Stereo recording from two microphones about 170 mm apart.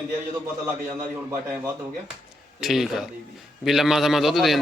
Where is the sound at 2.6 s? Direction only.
Centre (ahead or behind).